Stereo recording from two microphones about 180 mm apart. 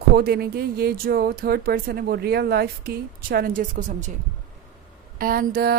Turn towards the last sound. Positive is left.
turn(degrees=-55)  # may be behind; listen again after turning